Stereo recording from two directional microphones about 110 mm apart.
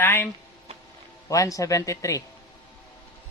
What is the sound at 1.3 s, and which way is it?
Speech, 30° left (ahead or behind).